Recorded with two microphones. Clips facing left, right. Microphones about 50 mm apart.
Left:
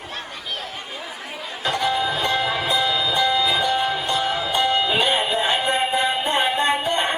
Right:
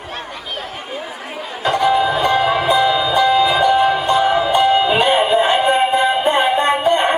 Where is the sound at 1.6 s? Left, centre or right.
Right.